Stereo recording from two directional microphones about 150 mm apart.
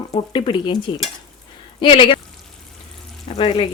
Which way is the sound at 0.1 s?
35° left (ahead or behind).